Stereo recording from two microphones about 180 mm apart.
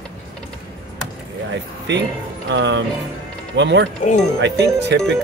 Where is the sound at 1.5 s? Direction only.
80° right.